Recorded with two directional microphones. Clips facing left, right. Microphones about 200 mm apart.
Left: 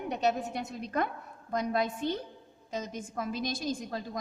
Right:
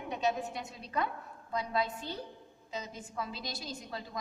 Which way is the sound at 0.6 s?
50° left (ahead or behind).